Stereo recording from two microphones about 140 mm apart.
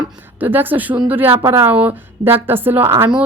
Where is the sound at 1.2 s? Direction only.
45° right (ahead or behind).